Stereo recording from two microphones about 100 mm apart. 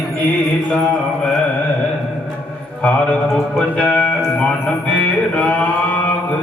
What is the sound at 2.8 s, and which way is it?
Speech, 10° left (ahead or behind).